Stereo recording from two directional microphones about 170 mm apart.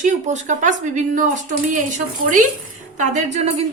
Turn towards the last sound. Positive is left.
turn(degrees=-35)  # may be behind; listen again after turning